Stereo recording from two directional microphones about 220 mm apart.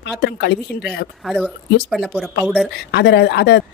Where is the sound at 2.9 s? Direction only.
50° left (ahead or behind).